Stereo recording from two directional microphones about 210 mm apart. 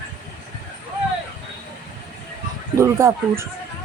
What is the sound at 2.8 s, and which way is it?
Speech, 15° right (ahead or behind).